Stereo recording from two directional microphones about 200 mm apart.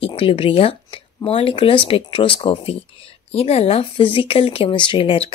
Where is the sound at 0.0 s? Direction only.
30° left (ahead or behind).